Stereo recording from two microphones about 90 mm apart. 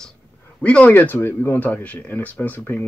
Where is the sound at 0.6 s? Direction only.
15° left (ahead or behind).